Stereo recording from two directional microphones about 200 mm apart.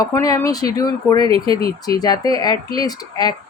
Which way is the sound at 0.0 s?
15° left (ahead or behind).